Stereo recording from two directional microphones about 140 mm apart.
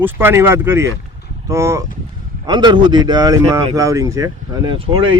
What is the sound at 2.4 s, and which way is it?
Speech, 30° right (ahead or behind).